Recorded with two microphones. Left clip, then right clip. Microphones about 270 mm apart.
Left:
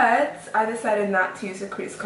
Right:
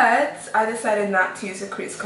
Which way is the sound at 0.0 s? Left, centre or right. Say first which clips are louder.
Right 2 dB; centre.